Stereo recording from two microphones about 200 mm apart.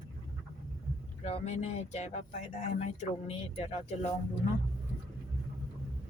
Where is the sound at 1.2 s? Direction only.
30° left (ahead or behind).